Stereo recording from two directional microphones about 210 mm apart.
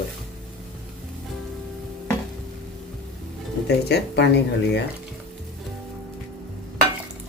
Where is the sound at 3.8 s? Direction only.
50° left (ahead or behind).